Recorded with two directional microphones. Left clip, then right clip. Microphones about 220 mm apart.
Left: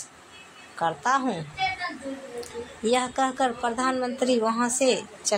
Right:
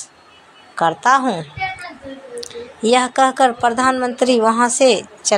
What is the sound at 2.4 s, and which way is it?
Speech, 30° right (ahead or behind).